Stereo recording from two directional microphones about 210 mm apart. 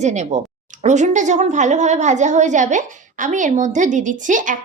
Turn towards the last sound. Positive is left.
turn(degrees=-40)  # may be behind; listen again after turning